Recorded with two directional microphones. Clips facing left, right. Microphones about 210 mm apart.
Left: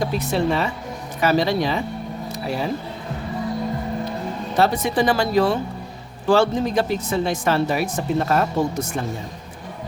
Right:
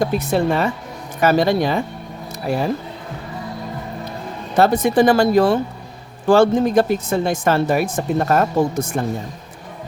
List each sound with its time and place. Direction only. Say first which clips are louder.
0.0 s a woman's voice: right 3 dB; 50° right (ahead or behind)
2.3 s a sound: right 5 dB; 50° right (ahead or behind)
4.5 s a woman's voice: right 5 dB; 50° right (ahead or behind)